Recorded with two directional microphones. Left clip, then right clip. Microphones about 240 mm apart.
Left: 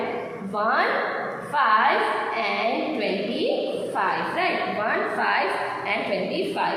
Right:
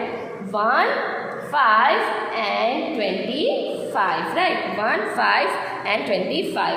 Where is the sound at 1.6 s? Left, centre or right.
Right.